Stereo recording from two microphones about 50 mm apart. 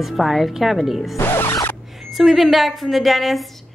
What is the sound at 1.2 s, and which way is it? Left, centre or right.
Music, left.